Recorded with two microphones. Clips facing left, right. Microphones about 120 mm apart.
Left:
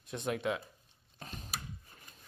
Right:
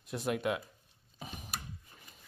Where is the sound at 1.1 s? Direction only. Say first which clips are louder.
Right 1 dB; 10° right (ahead or behind).